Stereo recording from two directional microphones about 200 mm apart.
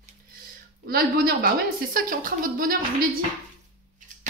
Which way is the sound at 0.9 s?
50° right (ahead or behind).